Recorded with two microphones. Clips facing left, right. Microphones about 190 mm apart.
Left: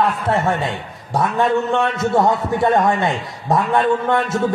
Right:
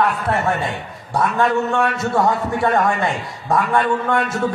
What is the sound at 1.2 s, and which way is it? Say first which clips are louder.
A man's voice: even; 20° left (ahead or behind).